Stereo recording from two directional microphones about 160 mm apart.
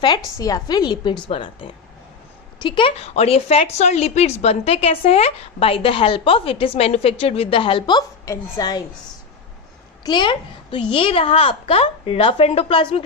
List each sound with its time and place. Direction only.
0.3 s a woman's voice: 20° left (ahead or behind)
10.0 s speech: 30° left (ahead or behind)